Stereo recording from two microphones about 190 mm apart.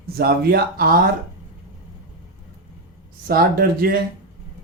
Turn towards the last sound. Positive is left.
turn(degrees=-50)  # may be behind; listen again after turning